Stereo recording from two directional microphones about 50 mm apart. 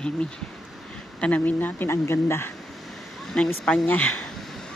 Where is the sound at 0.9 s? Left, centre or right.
Left.